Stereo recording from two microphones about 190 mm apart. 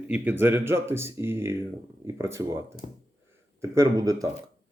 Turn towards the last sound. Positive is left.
turn(degrees=-20)  # may be behind; listen again after turning